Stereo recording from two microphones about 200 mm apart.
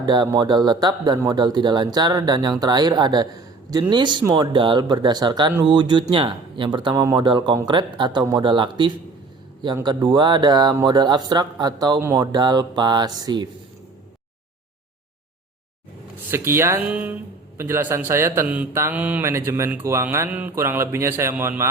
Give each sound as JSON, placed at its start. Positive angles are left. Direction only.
{"t": 0.0, "sound": "speech", "side_deg": -20}
{"t": 16.3, "sound": "a man's voice", "side_deg": -10}